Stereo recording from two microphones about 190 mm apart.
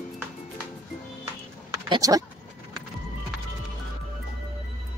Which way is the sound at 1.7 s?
20° right (ahead or behind).